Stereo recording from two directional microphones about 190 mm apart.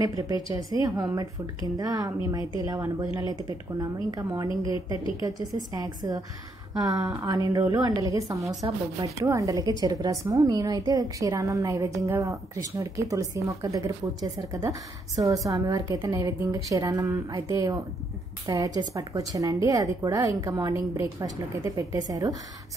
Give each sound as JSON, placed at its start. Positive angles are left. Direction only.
{"t": 0.0, "sound": "a woman's voice", "side_deg": -20}
{"t": 18.8, "sound": "a woman's voice", "side_deg": -20}